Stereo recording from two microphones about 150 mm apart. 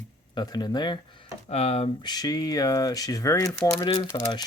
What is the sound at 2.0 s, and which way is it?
Speech, 25° left (ahead or behind).